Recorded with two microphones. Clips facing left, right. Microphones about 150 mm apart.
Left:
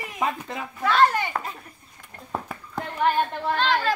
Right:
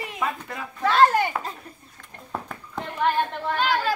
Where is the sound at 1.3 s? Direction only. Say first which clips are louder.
Even; 5° right (ahead or behind).